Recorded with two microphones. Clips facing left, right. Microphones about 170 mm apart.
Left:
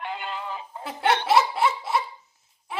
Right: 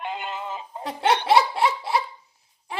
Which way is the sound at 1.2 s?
Centre (ahead or behind).